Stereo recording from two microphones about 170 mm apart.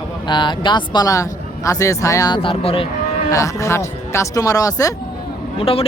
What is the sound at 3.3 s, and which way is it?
Speech, 20° left (ahead or behind).